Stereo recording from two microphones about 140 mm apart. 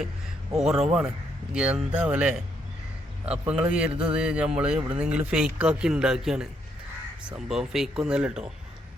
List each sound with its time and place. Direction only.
0.6 s speech: 5° right (ahead or behind)
3.4 s speech: 10° right (ahead or behind)